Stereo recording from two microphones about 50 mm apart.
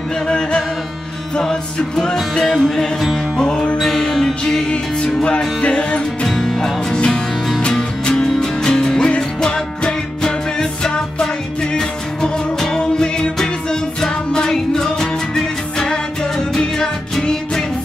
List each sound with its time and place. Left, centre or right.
0.3 s music: centre
2.5 s music: centre
3.3 s music: centre
4.6 s music: left
6.2 s music: centre
8.1 s music: centre